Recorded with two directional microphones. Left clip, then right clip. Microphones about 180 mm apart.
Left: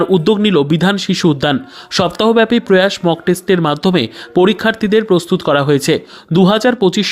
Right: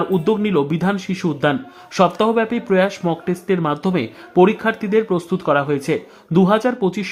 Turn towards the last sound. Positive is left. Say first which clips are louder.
# left 6 dB
turn(degrees=30)  # may be behind; listen again after turning